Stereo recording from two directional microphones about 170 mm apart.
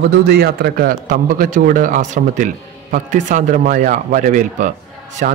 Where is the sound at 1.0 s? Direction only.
50° right (ahead or behind).